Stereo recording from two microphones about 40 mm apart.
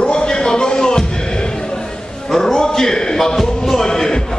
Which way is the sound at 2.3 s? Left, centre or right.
Centre.